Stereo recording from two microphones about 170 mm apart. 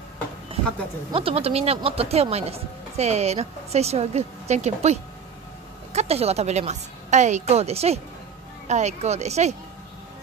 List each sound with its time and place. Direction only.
1.1 s speech: 35° right (ahead or behind)
5.9 s speech: 35° right (ahead or behind)